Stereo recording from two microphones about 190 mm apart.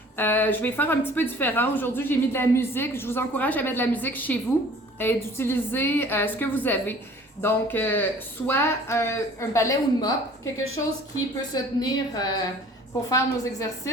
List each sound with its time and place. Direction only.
0.2 s a woman's voice: 10° left (ahead or behind)
11.5 s a woman's voice: 20° left (ahead or behind)